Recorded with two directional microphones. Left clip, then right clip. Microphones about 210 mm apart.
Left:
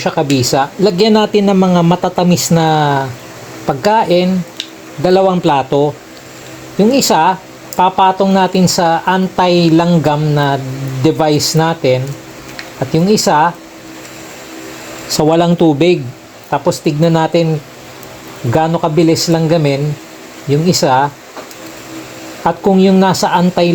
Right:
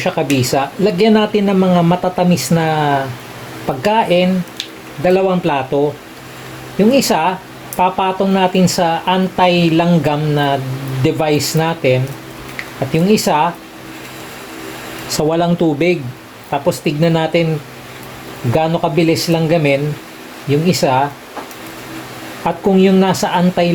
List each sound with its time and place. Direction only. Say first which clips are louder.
0.0 s speech: left 2 dB; 25° left (ahead or behind)
15.1 s speech: left 4 dB; 30° left (ahead or behind)
18.5 s speech: left 2 dB; 25° left (ahead or behind)
22.4 s speech: left 2 dB; 25° left (ahead or behind)